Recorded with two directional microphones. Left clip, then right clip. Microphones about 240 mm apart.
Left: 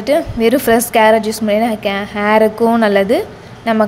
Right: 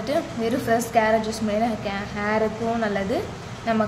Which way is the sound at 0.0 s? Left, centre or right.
Left.